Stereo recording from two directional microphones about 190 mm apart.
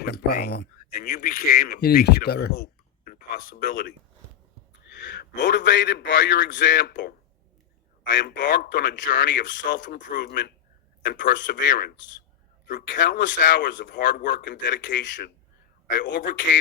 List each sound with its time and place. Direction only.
0.0 s speech: 55° left (ahead or behind)
4.9 s a man's voice: 65° left (ahead or behind)
8.1 s speech: 70° left (ahead or behind)
9.8 s speech: 45° left (ahead or behind)
10.2 s speech: 65° left (ahead or behind)
11.5 s speech: 45° left (ahead or behind)
12.9 s speech: 65° left (ahead or behind)
13.7 s speech: 45° left (ahead or behind)
14.2 s speech: 55° left (ahead or behind)
14.8 s speech: 70° left (ahead or behind)
16.0 s speech: 65° left (ahead or behind)